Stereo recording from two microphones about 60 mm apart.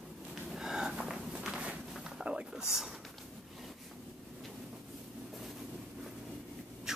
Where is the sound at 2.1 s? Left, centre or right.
Centre.